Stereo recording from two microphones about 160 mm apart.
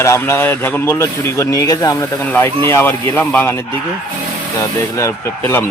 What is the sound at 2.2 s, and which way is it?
Speech, 10° left (ahead or behind).